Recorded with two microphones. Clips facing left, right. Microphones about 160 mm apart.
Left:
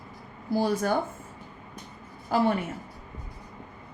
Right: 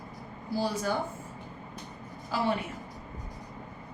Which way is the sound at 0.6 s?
55° left (ahead or behind).